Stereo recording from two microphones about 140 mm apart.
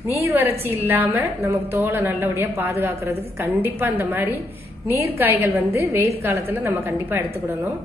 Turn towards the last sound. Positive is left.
turn(degrees=-15)  # may be behind; listen again after turning